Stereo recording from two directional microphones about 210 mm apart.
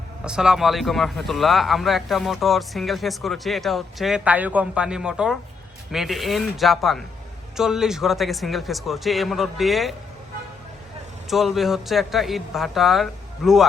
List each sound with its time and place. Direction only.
0.3 s speech: 5° right (ahead or behind)
11.3 s speech: centre (ahead or behind)